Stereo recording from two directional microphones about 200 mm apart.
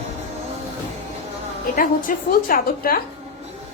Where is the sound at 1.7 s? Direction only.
45° left (ahead or behind).